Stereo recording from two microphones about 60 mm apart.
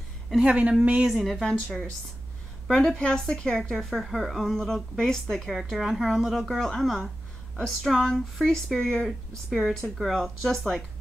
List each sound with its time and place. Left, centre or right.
0.5 s speech: centre
1.0 s a woman's voice: centre